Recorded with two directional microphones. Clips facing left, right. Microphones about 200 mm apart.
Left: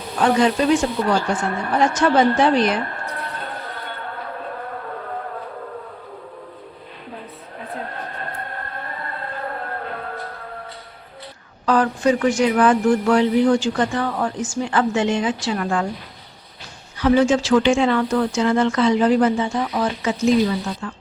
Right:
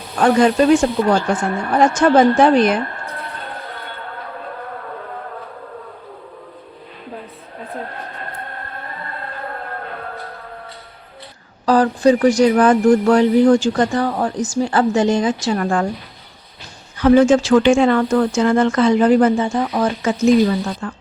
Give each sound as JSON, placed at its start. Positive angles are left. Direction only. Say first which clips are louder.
{"t": 0.2, "sound": "speech", "louder": "right 4 dB", "side_deg": -50}
{"t": 11.6, "sound": "speech", "louder": "right 4 dB", "side_deg": -35}
{"t": 17.0, "sound": "speech", "louder": "right 5 dB", "side_deg": -50}